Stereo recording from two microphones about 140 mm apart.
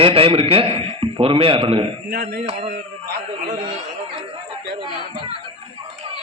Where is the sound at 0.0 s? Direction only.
40° right (ahead or behind).